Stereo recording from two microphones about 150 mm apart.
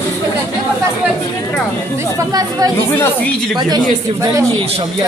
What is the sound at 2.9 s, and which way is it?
Speech, 15° left (ahead or behind).